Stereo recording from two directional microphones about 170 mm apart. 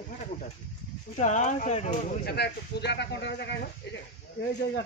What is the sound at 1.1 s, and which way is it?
Speech, 45° left (ahead or behind).